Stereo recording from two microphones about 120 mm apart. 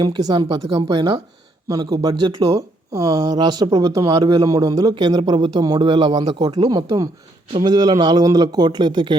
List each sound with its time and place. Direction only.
0.0 s speech: 35° right (ahead or behind)